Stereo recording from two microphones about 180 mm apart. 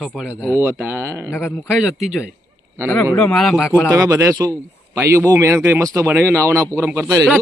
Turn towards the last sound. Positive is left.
turn(degrees=-10)  # may be behind; listen again after turning